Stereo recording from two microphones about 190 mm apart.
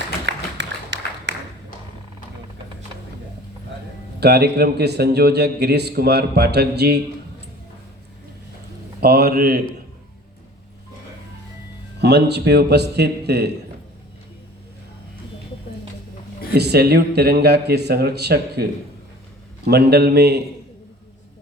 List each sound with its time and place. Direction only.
0.3 s a sound: 70° right (ahead or behind)
4.2 s a man's voice: 60° right (ahead or behind)
9.0 s a man's voice: 55° right (ahead or behind)
11.9 s a man's voice: 60° right (ahead or behind)
16.6 s a man's voice: 60° right (ahead or behind)